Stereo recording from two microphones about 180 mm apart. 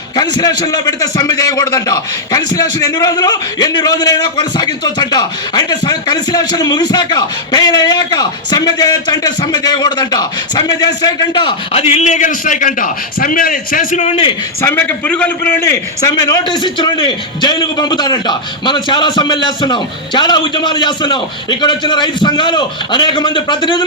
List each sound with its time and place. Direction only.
0.2 s a man's voice: 20° left (ahead or behind)
14.6 s a man's voice: 10° left (ahead or behind)